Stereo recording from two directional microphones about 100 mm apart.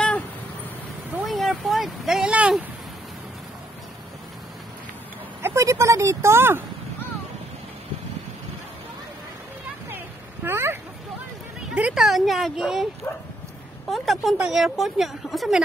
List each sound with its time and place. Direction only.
1.2 s speech: centre (ahead or behind)
5.4 s speech: 30° right (ahead or behind)
9.8 s a sound: 20° right (ahead or behind)
11.7 s a woman's voice: 5° right (ahead or behind)
13.0 s speech: 25° left (ahead or behind)
13.8 s a woman's voice: centre (ahead or behind)